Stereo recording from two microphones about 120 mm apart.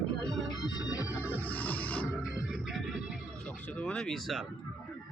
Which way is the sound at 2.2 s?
5° right (ahead or behind).